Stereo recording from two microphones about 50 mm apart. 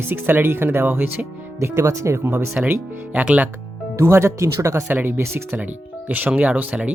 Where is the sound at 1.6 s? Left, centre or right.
Right.